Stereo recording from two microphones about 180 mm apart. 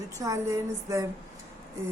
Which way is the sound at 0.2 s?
15° right (ahead or behind).